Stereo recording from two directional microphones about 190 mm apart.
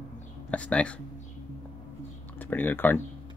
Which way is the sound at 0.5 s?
5° left (ahead or behind).